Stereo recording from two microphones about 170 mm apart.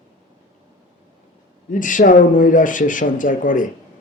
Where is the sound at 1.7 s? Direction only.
50° left (ahead or behind).